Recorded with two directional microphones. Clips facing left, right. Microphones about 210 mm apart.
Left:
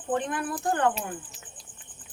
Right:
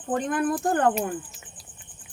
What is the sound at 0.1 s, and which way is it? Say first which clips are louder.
Speech: right 4 dB; 45° right (ahead or behind).